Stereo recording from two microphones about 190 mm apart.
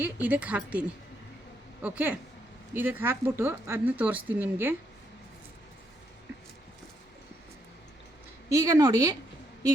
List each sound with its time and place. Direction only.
0.0 s speech: 10° right (ahead or behind)
8.4 s speech: 15° right (ahead or behind)